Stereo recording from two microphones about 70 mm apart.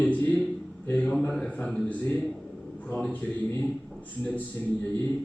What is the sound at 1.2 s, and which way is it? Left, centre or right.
A man's voice, centre.